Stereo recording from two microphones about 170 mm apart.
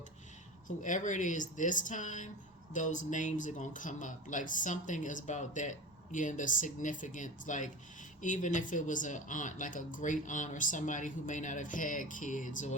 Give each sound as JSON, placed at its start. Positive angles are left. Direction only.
{"t": 0.8, "sound": "speech", "side_deg": 45}